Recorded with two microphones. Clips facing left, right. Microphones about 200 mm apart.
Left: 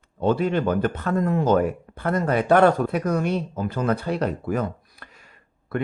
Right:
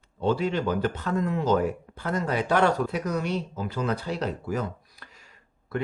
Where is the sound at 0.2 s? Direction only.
55° left (ahead or behind).